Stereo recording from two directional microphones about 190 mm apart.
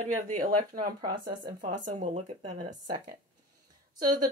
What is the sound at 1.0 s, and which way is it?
Speech, 20° right (ahead or behind).